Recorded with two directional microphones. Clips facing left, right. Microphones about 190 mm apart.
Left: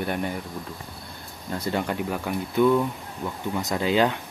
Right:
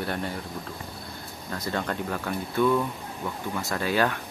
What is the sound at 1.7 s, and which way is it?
Speech, 15° left (ahead or behind).